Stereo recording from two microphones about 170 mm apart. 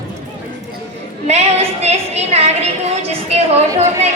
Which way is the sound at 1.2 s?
40° right (ahead or behind).